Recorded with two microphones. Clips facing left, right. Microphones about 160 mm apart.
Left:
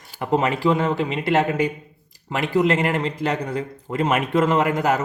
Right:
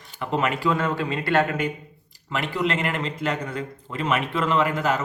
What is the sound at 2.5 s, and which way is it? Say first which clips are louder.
A man's voice: left 7 dB; 40° left (ahead or behind).